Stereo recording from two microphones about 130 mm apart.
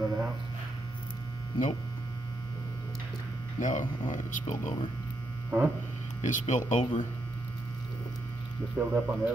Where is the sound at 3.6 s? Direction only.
85° left.